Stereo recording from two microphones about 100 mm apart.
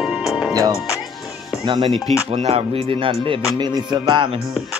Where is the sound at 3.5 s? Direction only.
45° right (ahead or behind).